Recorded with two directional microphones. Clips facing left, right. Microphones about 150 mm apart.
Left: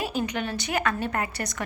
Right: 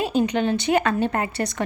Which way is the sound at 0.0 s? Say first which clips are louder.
Right 7 dB; 25° right (ahead or behind).